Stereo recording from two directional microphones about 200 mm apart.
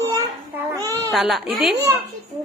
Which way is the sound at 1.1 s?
Centre (ahead or behind).